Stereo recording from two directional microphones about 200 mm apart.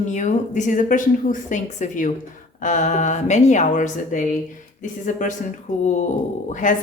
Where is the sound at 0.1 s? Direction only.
40° left (ahead or behind).